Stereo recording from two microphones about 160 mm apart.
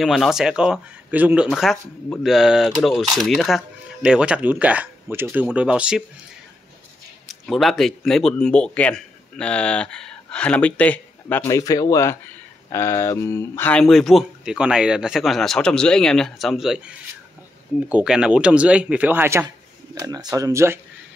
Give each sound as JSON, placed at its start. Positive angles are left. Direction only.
{"t": 0.0, "sound": "speech", "side_deg": 0}
{"t": 7.2, "sound": "a man's voice", "side_deg": 0}
{"t": 17.9, "sound": "speech", "side_deg": -5}